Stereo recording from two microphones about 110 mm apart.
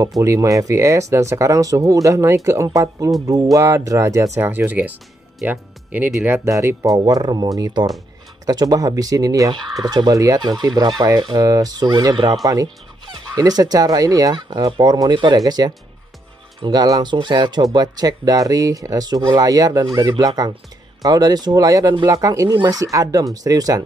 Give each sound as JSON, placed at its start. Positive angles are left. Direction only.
{"t": 0.2, "sound": "speech", "side_deg": -30}
{"t": 4.4, "sound": "speech", "side_deg": -15}